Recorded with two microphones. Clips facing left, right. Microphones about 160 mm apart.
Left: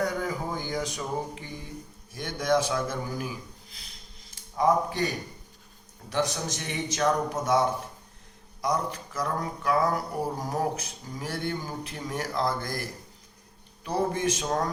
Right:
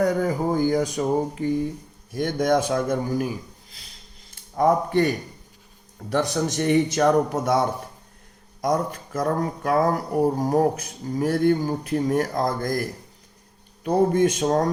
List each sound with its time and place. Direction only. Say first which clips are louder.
0.0 s speech: right 8 dB; 45° right (ahead or behind)
4.5 s a man's voice: right 5 dB; 55° right (ahead or behind)
8.6 s speech: right 5 dB; 45° right (ahead or behind)
13.8 s speech: right 8 dB; 45° right (ahead or behind)